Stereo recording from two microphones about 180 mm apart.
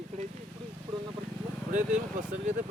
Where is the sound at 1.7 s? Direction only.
45° right (ahead or behind).